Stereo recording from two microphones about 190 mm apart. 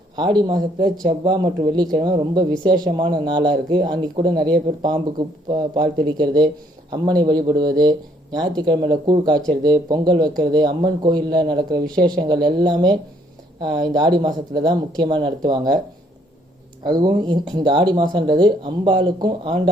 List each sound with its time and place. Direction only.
0.2 s speech: 25° right (ahead or behind)
5.5 s speech: 20° right (ahead or behind)
17.0 s speech: 25° right (ahead or behind)